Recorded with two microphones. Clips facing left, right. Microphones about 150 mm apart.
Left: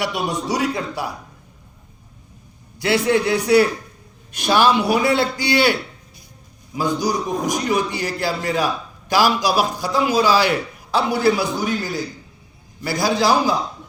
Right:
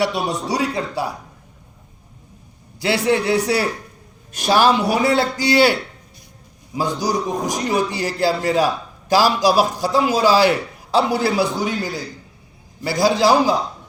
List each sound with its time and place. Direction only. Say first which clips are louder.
0.0 s a man's voice: right 2 dB; 35° right (ahead or behind)
2.8 s a man's voice: even; 30° right (ahead or behind)
6.7 s a man's voice: even; 35° right (ahead or behind)